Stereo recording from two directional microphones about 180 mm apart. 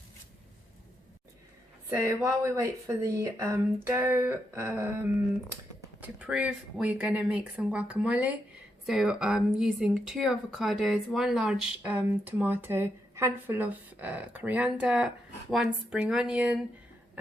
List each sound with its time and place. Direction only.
1.9 s speech: 15° right (ahead or behind)